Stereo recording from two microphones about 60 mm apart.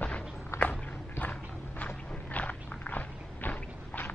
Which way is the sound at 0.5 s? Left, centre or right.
Left.